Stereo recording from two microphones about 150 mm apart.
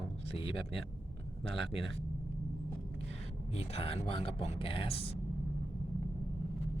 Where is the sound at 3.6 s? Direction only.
40° left (ahead or behind).